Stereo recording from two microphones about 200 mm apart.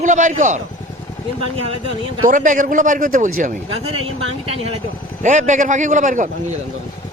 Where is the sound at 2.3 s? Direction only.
40° right (ahead or behind).